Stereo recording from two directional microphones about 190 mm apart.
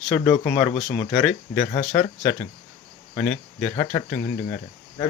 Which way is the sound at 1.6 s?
35° left (ahead or behind).